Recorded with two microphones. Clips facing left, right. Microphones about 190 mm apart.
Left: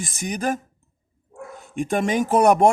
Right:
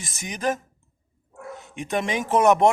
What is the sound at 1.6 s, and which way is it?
A man's voice, 45° left (ahead or behind).